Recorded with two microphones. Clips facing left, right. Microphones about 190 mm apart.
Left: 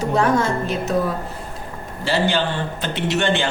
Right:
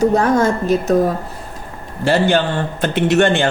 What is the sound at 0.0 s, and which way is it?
A man's voice, 40° right (ahead or behind).